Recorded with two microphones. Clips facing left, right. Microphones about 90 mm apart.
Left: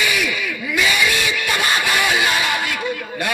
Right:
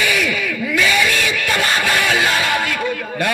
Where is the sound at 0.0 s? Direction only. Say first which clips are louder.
Right 2 dB; 20° left (ahead or behind).